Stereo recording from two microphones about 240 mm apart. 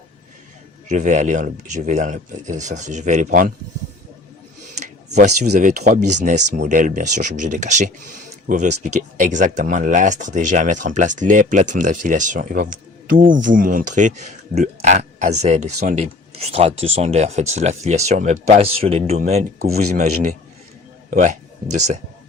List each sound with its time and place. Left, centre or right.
0.9 s speech: right
5.5 s speech: right
12.7 s a sound: right
13.4 s speech: right